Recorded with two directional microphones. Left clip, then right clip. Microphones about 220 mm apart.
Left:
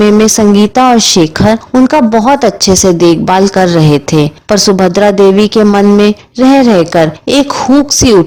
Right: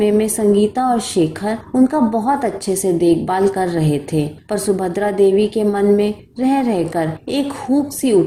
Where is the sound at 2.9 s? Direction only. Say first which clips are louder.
Left 8 dB; 45° left (ahead or behind).